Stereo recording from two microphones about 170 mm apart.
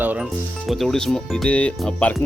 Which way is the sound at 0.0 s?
10° right (ahead or behind).